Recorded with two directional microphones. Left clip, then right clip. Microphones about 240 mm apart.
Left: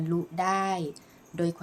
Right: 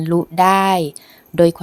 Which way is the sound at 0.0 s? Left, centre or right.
Right.